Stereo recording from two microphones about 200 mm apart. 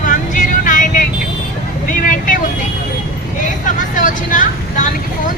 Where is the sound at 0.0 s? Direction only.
40° left (ahead or behind).